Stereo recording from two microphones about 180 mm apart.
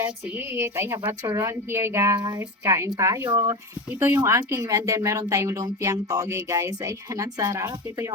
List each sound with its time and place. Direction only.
0.0 s speech: 15° right (ahead or behind)